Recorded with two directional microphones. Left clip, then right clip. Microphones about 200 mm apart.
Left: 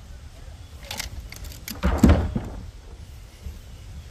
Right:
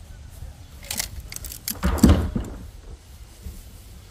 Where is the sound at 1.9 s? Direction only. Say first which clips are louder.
Right 1 dB; 40° right (ahead or behind).